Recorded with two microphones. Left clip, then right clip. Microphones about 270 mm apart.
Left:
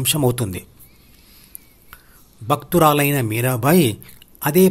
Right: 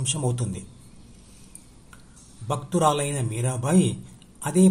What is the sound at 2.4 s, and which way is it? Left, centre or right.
Speech, left.